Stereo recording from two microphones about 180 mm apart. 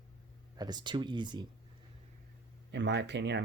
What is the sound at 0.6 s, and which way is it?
Speech, 25° right (ahead or behind).